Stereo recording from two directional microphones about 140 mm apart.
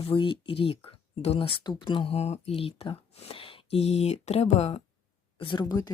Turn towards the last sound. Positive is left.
turn(degrees=30)  # may be behind; listen again after turning